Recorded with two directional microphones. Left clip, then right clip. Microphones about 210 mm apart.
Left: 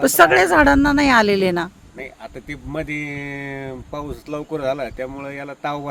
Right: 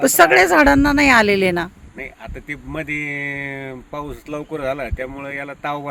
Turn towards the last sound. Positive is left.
turn(degrees=-5)  # may be behind; listen again after turning